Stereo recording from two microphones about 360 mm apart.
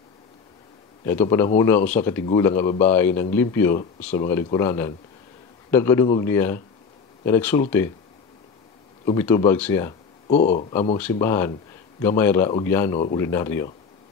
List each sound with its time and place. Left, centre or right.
1.0 s speech: centre
9.0 s speech: centre
10.2 s speech: centre
11.0 s speech: centre